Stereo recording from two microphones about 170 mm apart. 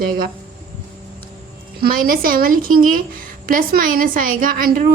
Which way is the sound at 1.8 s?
55° right (ahead or behind).